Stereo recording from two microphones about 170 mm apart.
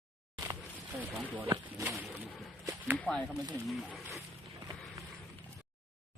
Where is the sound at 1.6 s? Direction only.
10° right (ahead or behind).